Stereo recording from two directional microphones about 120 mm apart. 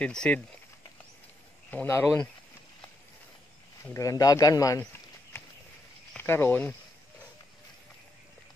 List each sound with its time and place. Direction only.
0.0 s speech: 10° left (ahead or behind)
1.7 s speech: 20° left (ahead or behind)
3.9 s speech: 30° left (ahead or behind)
6.1 s speech: 20° left (ahead or behind)